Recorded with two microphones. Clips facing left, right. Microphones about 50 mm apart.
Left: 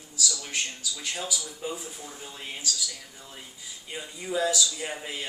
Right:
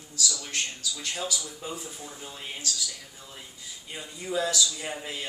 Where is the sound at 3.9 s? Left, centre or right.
Centre.